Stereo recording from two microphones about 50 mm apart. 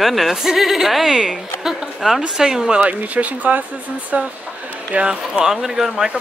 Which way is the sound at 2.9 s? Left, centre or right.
Right.